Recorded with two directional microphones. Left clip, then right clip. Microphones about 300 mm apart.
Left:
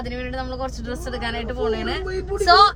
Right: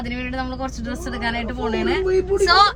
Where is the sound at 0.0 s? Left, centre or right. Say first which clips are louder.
Right 2 dB; centre.